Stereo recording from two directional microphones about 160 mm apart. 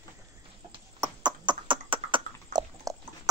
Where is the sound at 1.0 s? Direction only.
25° right (ahead or behind).